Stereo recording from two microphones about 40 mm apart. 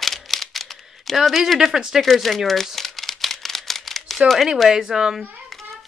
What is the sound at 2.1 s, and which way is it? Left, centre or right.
Speech, centre.